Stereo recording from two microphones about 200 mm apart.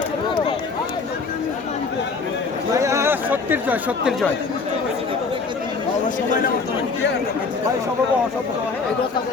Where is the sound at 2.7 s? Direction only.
15° right (ahead or behind).